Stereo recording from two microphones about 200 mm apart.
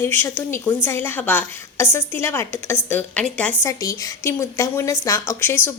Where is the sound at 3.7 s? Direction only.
15° left (ahead or behind).